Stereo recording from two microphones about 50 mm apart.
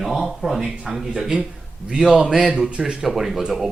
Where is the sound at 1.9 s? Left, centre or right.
Centre.